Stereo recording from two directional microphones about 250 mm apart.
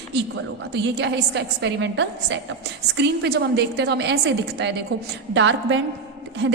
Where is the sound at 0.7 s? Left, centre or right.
Right.